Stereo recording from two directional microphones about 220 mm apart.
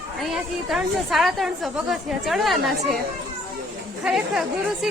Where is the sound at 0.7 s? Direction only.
Centre (ahead or behind).